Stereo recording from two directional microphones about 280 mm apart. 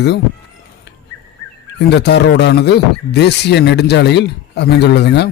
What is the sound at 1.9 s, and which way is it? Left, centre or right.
Speech, left.